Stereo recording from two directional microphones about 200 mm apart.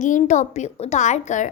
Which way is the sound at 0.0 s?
40° left (ahead or behind).